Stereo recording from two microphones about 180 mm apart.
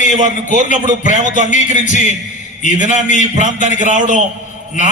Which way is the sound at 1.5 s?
45° left (ahead or behind).